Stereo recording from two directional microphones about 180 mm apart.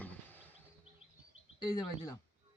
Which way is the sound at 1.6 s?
20° left (ahead or behind).